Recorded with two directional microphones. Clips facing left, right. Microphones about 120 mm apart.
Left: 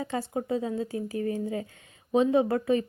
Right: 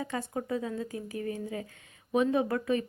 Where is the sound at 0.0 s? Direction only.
30° left (ahead or behind).